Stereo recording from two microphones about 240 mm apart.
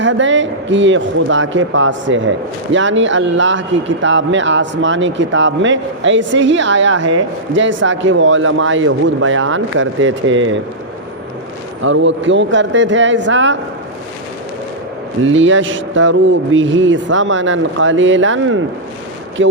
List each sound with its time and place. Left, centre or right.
0.0 s speech: right
11.8 s speech: right
15.3 s speech: right